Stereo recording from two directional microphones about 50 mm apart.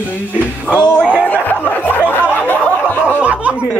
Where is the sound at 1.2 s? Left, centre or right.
Left.